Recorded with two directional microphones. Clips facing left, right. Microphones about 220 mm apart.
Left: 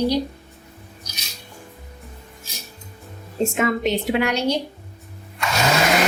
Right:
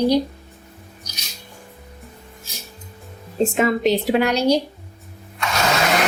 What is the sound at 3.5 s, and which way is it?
A woman's voice, 35° right (ahead or behind).